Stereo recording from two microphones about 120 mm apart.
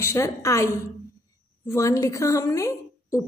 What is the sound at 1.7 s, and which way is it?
A woman's voice, 25° left (ahead or behind).